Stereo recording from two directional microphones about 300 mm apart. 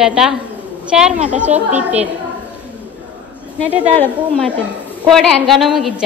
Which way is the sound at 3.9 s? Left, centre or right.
Centre.